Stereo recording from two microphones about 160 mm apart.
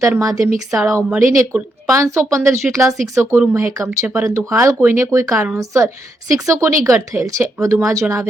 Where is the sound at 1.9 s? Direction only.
20° right (ahead or behind).